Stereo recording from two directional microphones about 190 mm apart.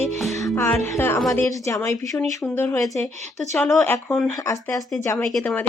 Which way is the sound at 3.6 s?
5° left (ahead or behind).